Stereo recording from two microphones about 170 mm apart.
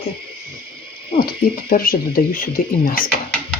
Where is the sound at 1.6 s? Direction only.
55° left (ahead or behind).